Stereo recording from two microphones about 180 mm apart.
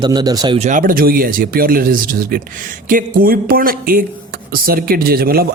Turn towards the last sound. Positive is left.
turn(degrees=-55)  # may be behind; listen again after turning